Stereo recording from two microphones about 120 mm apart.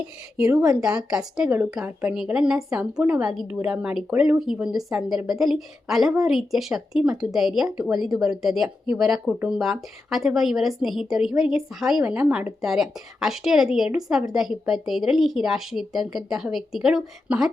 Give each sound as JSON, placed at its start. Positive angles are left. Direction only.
{"t": 0.3, "sound": "a woman's voice", "side_deg": -5}
{"t": 1.5, "sound": "a woman's voice", "side_deg": -15}